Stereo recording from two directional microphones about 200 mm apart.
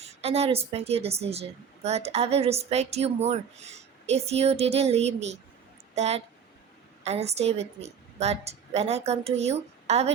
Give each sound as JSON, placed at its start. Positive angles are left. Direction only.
{"t": 0.0, "sound": "a woman's voice", "side_deg": -30}